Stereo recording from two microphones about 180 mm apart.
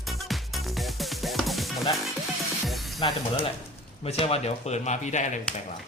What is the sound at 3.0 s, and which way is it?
Speech, 30° left (ahead or behind).